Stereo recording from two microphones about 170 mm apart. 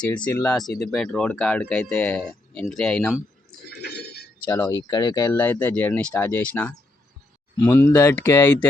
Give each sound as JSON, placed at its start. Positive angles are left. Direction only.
{"t": 0.3, "sound": "speech", "side_deg": 10}
{"t": 3.7, "sound": "a sound", "side_deg": 70}
{"t": 4.4, "sound": "speech", "side_deg": 10}